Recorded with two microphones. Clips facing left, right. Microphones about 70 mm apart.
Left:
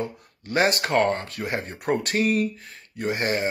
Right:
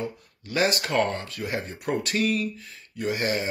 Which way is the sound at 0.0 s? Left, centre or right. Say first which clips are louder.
Left 2 dB; left.